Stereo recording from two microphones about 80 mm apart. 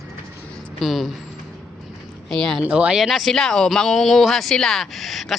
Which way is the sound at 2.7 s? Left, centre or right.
Centre.